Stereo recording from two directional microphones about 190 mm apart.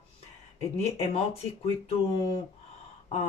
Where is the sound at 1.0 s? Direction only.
30° left (ahead or behind).